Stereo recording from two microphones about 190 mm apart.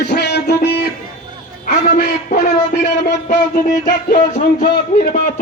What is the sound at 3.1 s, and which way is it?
A man's voice, 40° left (ahead or behind).